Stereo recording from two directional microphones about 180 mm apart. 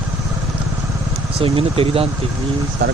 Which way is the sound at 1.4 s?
30° right (ahead or behind).